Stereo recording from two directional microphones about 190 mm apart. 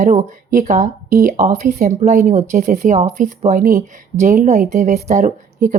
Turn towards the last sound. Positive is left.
turn(degrees=-45)  # may be behind; listen again after turning